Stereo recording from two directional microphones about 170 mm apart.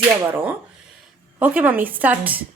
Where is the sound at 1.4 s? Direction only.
10° right (ahead or behind).